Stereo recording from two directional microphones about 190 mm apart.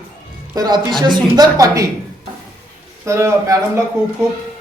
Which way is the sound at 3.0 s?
15° right (ahead or behind).